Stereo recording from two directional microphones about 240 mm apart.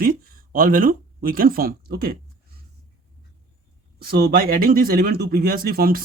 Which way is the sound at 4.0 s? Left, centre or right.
Right.